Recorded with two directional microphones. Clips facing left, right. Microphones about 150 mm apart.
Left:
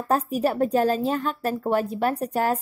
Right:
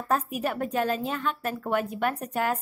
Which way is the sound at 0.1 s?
35° left (ahead or behind).